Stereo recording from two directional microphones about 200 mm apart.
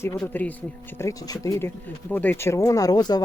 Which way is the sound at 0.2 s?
10° left (ahead or behind).